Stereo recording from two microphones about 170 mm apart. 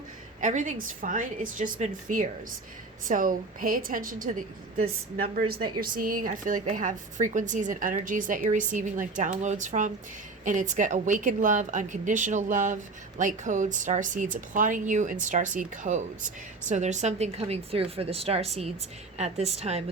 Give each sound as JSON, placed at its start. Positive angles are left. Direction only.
{"t": 0.4, "sound": "a woman's voice", "side_deg": -50}